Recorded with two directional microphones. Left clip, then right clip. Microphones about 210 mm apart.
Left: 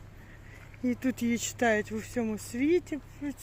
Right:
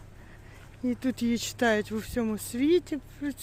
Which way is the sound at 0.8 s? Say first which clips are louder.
Right 1 dB; centre (ahead or behind).